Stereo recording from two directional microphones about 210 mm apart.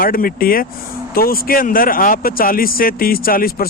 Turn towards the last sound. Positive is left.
turn(degrees=45)  # may be behind; listen again after turning